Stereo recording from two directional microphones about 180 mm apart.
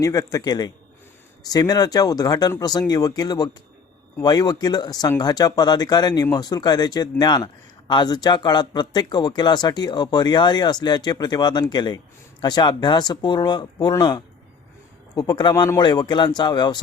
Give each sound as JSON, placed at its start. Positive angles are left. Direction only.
{"t": 0.0, "sound": "speech", "side_deg": 20}